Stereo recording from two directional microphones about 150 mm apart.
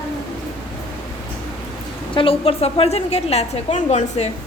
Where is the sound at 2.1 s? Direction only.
35° left (ahead or behind).